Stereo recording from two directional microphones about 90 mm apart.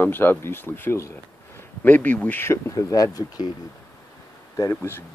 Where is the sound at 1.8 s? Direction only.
20° left (ahead or behind); by 3.5 s 40° left (ahead or behind).